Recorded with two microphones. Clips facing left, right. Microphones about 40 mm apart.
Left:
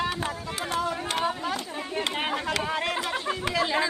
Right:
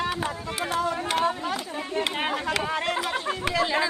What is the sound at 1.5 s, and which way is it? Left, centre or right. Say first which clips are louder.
Chatter: right 2 dB; centre.